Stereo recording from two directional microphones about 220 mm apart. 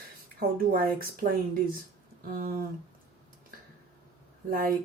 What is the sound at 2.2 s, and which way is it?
Speech, 40° right (ahead or behind).